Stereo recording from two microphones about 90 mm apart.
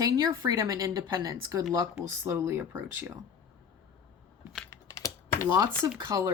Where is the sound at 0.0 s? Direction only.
40° right (ahead or behind).